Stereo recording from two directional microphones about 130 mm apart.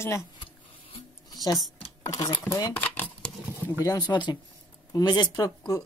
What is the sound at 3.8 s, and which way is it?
Speech, 30° left (ahead or behind).